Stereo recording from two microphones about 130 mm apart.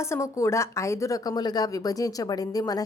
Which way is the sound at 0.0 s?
20° left (ahead or behind).